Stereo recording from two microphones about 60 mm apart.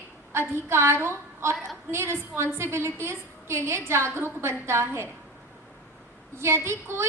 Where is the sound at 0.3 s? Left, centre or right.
Right.